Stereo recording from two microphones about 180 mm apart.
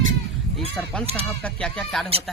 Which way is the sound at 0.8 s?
Centre (ahead or behind).